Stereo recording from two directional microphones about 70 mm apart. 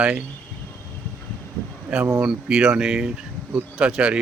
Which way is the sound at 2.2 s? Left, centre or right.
Centre.